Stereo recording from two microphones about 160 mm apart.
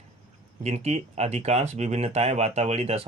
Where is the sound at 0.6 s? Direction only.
40° right (ahead or behind).